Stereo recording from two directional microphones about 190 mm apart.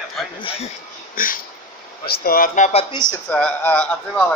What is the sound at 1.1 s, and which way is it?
Speech, 45° left (ahead or behind).